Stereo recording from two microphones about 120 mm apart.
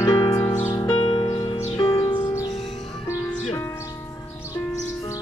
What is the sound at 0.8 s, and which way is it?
Music, 45° left (ahead or behind).